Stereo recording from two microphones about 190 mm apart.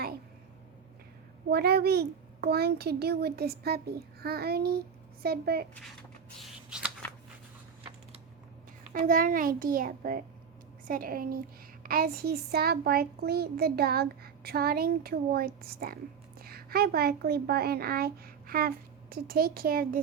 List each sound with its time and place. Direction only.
1.5 s a child's voice: 55° right (ahead or behind)
6.4 s shuffling cards: 5° right (ahead or behind)
9.0 s a child's voice: 45° right (ahead or behind)